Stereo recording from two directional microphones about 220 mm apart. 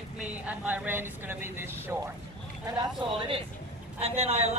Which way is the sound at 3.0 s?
20° right (ahead or behind).